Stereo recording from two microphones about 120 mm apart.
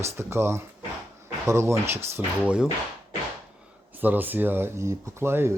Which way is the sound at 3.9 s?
15° right (ahead or behind).